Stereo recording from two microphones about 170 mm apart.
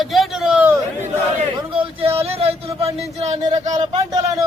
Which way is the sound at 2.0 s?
35° right (ahead or behind).